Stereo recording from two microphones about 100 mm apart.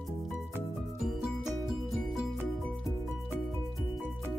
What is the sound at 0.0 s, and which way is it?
Music, centre (ahead or behind).